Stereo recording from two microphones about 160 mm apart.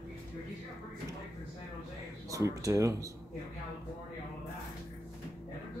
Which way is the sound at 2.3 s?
20° right (ahead or behind).